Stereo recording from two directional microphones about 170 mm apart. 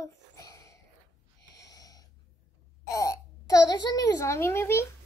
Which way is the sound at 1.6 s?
20° left (ahead or behind).